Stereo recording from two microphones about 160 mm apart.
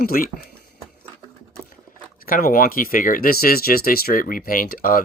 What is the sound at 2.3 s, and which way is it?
Speech, 60° left (ahead or behind).